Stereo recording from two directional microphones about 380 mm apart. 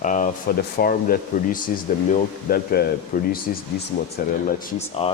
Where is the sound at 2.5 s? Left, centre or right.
Left.